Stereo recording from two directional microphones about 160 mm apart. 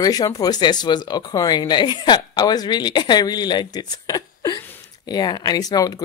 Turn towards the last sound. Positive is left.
turn(degrees=25)  # may be behind; listen again after turning